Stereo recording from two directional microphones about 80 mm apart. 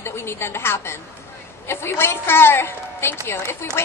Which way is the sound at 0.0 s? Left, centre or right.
Left.